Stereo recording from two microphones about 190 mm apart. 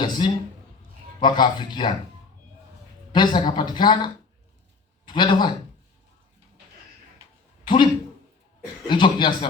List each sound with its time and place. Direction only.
0.0 s speech: 25° left (ahead or behind)
3.1 s speech: 25° left (ahead or behind)
7.6 s speech: 25° left (ahead or behind)
8.9 s speech: 25° left (ahead or behind)